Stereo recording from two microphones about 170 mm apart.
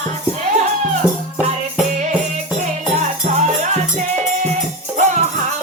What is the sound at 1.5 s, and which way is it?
Music, 45° right (ahead or behind).